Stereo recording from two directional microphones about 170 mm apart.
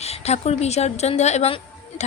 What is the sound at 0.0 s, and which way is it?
A woman's voice, 40° left (ahead or behind).